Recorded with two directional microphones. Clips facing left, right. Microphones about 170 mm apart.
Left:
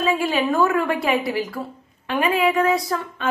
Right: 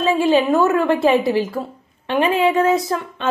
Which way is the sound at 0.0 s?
25° right (ahead or behind).